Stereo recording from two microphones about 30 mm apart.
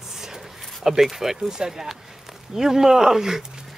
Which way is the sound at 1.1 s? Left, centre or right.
Centre.